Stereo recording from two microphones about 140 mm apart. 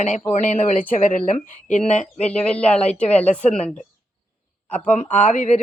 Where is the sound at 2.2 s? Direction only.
10° left (ahead or behind).